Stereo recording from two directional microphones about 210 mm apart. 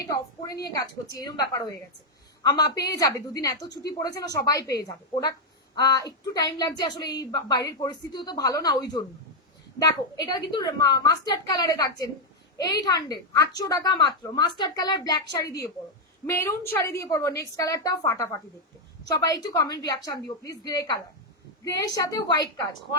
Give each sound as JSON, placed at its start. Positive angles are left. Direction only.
{"t": 0.1, "sound": "a woman's voice", "side_deg": 20}